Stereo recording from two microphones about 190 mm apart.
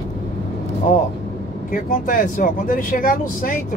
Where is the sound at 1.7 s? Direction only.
45° left (ahead or behind).